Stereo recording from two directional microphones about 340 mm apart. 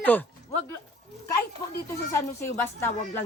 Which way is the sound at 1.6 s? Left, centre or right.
Centre.